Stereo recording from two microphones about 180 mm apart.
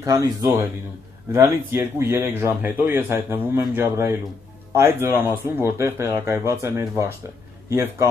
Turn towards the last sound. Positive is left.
turn(degrees=-15)  # may be behind; listen again after turning